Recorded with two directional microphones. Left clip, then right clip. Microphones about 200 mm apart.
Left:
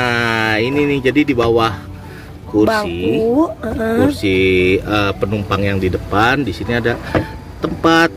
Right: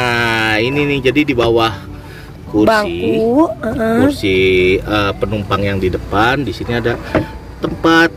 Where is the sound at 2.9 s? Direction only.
30° left (ahead or behind).